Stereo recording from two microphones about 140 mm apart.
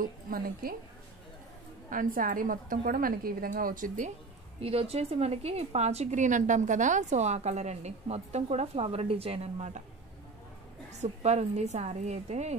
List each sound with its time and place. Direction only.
0.0 s speech: 90° right
1.9 s a woman's voice: 80° right
4.6 s a woman's voice: 45° right (ahead or behind)
10.9 s a woman's voice: 55° right (ahead or behind)